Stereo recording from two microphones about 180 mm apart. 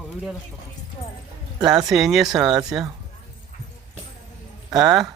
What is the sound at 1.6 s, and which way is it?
Speech, 20° right (ahead or behind).